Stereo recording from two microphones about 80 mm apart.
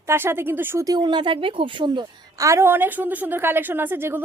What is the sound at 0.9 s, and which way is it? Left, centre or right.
Speech, right.